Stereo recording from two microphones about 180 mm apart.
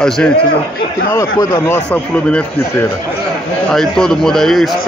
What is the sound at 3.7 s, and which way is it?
A man's voice, centre (ahead or behind).